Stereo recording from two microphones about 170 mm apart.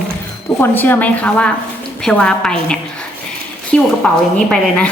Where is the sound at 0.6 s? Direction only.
10° left (ahead or behind).